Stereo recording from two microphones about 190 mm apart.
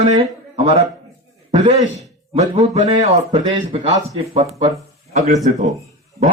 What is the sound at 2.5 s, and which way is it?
Speech, 35° right (ahead or behind).